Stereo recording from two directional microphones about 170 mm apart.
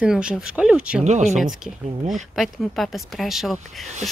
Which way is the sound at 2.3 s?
Centre (ahead or behind).